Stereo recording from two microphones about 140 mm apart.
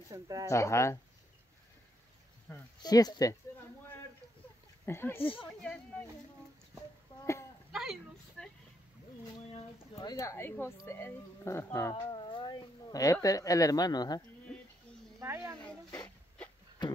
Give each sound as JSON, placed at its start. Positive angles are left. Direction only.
{"t": 0.1, "sound": "speech", "side_deg": -25}
{"t": 0.5, "sound": "speech", "side_deg": 20}
{"t": 2.8, "sound": "speech", "side_deg": 30}
{"t": 4.8, "sound": "speech", "side_deg": 15}
{"t": 5.2, "sound": "speech", "side_deg": 40}
{"t": 5.6, "sound": "speech", "side_deg": 5}
{"t": 7.7, "sound": "a sound", "side_deg": 0}
{"t": 8.4, "sound": "vehicle", "side_deg": 5}
{"t": 9.9, "sound": "speech", "side_deg": 25}
{"t": 11.9, "sound": "speech", "side_deg": 35}
{"t": 14.5, "sound": "a sound", "side_deg": 0}
{"t": 15.1, "sound": "a sound", "side_deg": -20}
{"t": 15.5, "sound": "a sound", "side_deg": 5}